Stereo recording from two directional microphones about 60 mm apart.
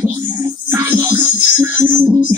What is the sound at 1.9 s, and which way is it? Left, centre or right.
Music, right.